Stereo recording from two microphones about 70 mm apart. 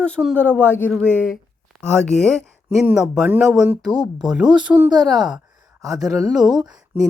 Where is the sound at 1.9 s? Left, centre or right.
Centre.